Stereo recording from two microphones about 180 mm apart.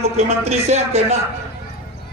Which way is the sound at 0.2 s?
35° right (ahead or behind).